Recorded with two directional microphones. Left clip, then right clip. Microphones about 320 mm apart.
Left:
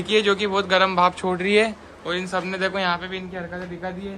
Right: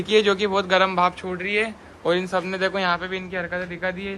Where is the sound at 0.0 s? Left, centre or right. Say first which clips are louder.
Right 1 dB; centre.